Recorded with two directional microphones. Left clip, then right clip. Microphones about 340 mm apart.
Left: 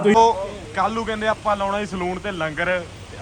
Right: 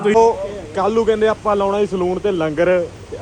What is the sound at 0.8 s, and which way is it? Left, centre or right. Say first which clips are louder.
Speech: right 7 dB; centre.